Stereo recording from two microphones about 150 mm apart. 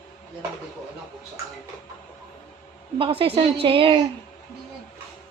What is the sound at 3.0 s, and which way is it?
Speech, 40° right (ahead or behind).